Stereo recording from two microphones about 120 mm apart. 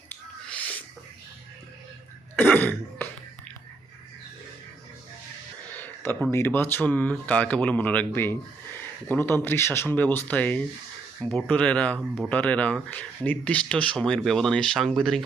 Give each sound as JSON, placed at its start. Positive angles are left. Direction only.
{"t": 0.1, "sound": "finger snapping", "side_deg": 10}
{"t": 2.4, "sound": "throat clearing", "side_deg": 15}
{"t": 5.8, "sound": "a sound", "side_deg": 15}
{"t": 6.3, "sound": "speech", "side_deg": 20}